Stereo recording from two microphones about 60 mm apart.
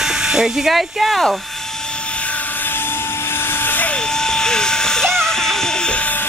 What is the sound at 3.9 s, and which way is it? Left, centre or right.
Vehicle, centre.